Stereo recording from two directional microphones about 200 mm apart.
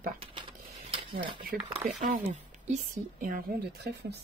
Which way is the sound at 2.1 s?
40° right (ahead or behind).